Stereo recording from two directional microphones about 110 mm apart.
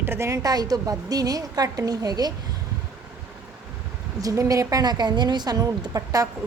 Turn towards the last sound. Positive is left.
turn(degrees=-35)  # may be behind; listen again after turning